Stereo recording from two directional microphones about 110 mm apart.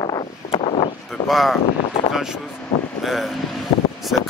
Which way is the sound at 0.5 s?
55° left (ahead or behind).